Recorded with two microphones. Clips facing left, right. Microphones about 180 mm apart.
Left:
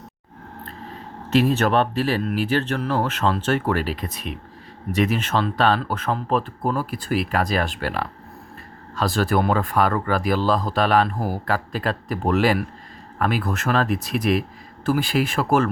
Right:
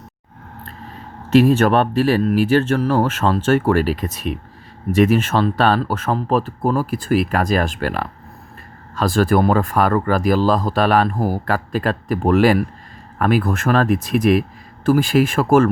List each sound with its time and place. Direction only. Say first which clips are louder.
1.3 s speech: right 6 dB; 50° right (ahead or behind)